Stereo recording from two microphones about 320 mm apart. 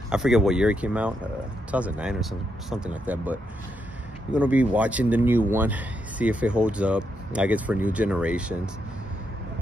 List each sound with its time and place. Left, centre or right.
0.1 s speech: centre